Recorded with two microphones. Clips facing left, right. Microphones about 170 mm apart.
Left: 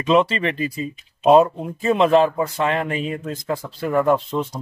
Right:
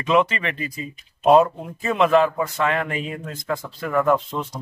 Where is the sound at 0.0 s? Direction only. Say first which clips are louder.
Left 2 dB; 25° left (ahead or behind).